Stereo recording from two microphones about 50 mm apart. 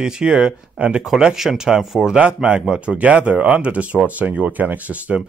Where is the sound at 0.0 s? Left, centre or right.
Centre.